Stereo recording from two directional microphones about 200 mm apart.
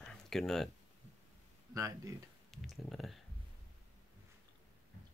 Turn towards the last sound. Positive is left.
turn(degrees=0)  # may be behind; listen again after turning